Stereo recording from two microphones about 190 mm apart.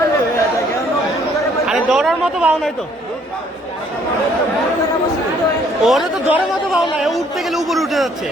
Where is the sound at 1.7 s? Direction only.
5° right (ahead or behind).